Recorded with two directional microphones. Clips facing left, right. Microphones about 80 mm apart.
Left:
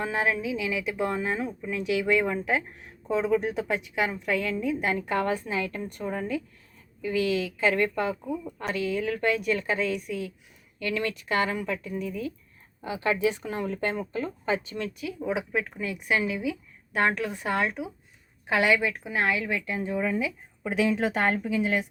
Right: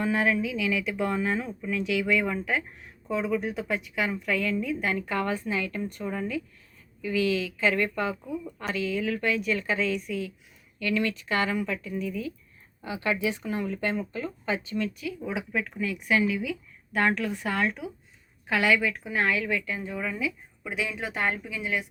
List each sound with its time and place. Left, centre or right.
0.0 s a woman's voice: left
8.6 s a woman's voice: left